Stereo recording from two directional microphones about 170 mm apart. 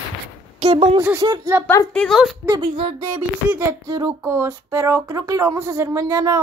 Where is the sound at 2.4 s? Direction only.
25° right (ahead or behind).